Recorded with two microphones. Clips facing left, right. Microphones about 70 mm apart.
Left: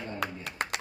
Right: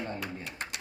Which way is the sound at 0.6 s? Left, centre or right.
Left.